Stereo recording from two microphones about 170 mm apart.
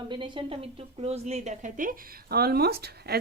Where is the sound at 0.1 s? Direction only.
30° right (ahead or behind).